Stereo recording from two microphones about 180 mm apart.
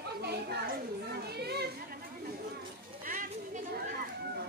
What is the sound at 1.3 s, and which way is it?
Chatter, 65° right (ahead or behind).